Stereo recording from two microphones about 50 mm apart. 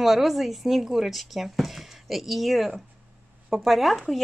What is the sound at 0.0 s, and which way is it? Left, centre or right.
Speech, centre.